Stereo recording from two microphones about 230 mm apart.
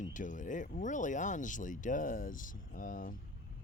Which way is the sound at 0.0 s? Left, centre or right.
Left.